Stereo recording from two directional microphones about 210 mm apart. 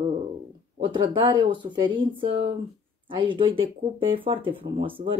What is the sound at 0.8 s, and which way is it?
Speech, 20° right (ahead or behind).